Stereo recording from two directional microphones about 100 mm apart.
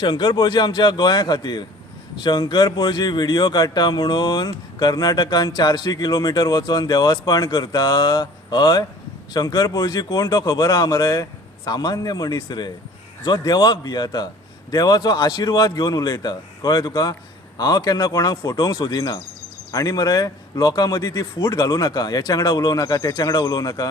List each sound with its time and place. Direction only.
0.0 s speech: 45° left (ahead or behind)